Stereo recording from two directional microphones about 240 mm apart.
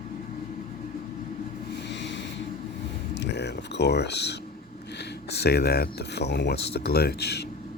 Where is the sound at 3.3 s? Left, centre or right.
Left.